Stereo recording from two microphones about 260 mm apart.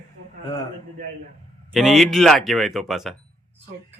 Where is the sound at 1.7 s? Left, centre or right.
Centre.